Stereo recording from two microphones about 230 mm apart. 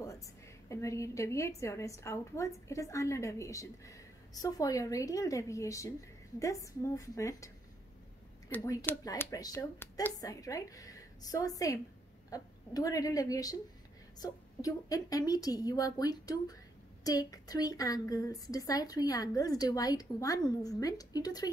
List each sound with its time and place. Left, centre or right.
0.7 s a woman's voice: centre